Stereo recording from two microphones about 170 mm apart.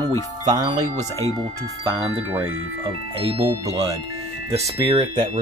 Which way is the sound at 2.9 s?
35° right (ahead or behind).